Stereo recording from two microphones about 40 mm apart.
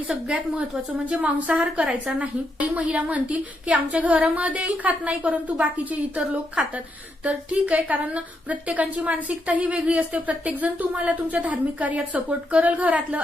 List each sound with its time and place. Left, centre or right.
1.2 s a woman's voice: right